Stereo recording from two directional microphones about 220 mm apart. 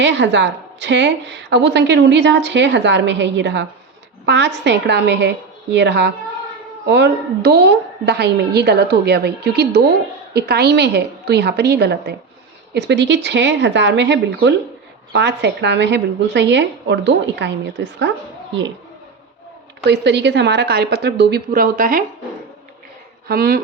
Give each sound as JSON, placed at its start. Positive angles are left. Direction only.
{"t": 0.0, "sound": "a woman's voice", "side_deg": -50}
{"t": 19.8, "sound": "a woman's voice", "side_deg": -50}
{"t": 23.3, "sound": "a woman's voice", "side_deg": -45}